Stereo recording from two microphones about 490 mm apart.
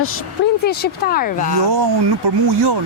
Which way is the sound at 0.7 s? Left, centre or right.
Centre.